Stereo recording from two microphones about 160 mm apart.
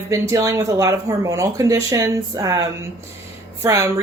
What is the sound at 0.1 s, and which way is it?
Speech, 20° right (ahead or behind).